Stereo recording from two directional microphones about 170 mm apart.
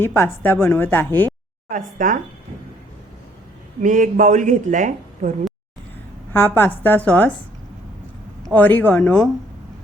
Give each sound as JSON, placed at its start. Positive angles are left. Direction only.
{"t": 0.0, "sound": "a woman's voice", "side_deg": 10}
{"t": 1.7, "sound": "speech", "side_deg": -50}
{"t": 3.8, "sound": "speech", "side_deg": -50}
{"t": 6.3, "sound": "a woman's voice", "side_deg": 10}
{"t": 8.5, "sound": "a woman's voice", "side_deg": 10}